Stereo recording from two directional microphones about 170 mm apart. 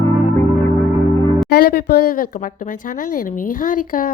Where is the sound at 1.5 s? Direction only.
65° left (ahead or behind).